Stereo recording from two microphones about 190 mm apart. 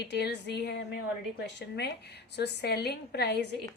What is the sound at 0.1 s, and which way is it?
A woman's voice, 60° left (ahead or behind).